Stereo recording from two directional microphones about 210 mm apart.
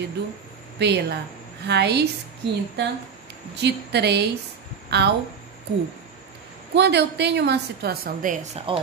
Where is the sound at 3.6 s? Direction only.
50° right (ahead or behind).